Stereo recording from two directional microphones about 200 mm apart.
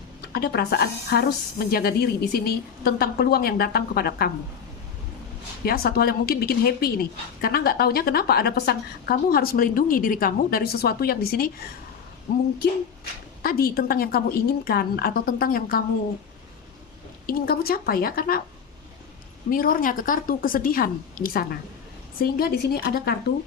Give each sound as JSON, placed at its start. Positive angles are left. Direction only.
{"t": 0.2, "sound": "a woman's voice", "side_deg": 50}
{"t": 5.6, "sound": "a woman's voice", "side_deg": 50}
{"t": 13.4, "sound": "a woman's voice", "side_deg": 50}
{"t": 17.2, "sound": "a woman's voice", "side_deg": 50}
{"t": 19.5, "sound": "a woman's voice", "side_deg": 45}